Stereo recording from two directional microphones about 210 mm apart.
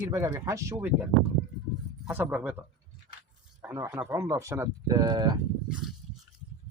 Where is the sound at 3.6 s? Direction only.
10° right (ahead or behind).